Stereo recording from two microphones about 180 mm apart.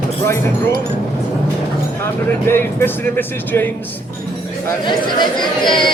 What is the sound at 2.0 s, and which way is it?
Speech, 15° left (ahead or behind).